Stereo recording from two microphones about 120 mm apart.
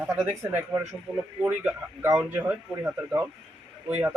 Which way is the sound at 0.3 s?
20° right (ahead or behind).